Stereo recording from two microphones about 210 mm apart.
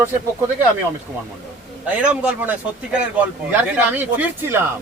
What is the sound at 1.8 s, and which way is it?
Speech, 5° right (ahead or behind).